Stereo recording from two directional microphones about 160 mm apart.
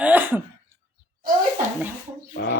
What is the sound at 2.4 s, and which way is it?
Speech, 90° left.